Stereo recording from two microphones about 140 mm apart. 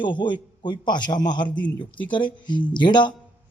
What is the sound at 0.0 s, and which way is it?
A man's voice, 35° left (ahead or behind).